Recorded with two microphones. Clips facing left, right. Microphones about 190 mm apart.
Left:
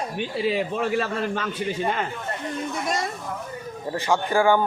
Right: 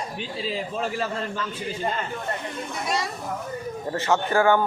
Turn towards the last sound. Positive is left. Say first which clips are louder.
# even
turn(degrees=15)  # may be behind; listen again after turning